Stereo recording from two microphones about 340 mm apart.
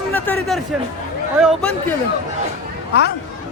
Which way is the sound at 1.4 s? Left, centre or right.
Centre.